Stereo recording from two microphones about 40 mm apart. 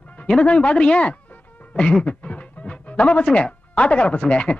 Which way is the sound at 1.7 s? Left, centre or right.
Left.